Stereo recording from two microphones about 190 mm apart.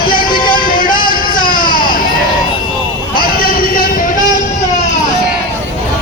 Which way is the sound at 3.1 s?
50° left (ahead or behind).